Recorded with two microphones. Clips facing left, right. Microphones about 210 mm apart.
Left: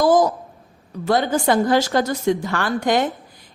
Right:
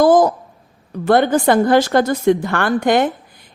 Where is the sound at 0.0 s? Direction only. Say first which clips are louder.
Right 4 dB; 55° right (ahead or behind).